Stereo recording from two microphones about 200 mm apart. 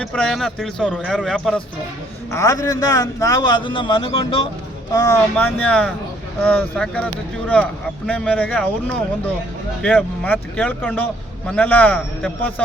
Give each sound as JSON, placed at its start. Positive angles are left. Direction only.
{"t": 0.0, "sound": "a man's voice", "side_deg": 5}
{"t": 2.3, "sound": "a man's voice", "side_deg": 15}
{"t": 4.9, "sound": "speech", "side_deg": 15}